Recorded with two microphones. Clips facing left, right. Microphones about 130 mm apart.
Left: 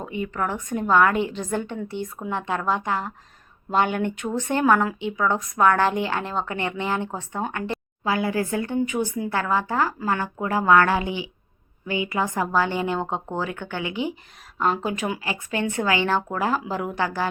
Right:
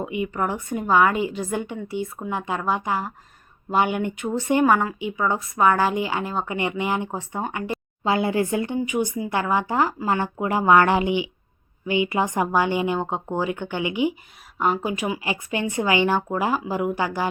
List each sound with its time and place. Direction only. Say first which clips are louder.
0.0 s speech: right 2 dB; 15° right (ahead or behind)
8.0 s speech: right 2 dB; 25° right (ahead or behind)
8.8 s speech: even; 10° right (ahead or behind)
15.2 s speech: right 1 dB; 15° right (ahead or behind)